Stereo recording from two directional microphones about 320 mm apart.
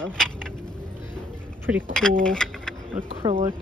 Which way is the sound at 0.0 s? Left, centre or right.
Centre.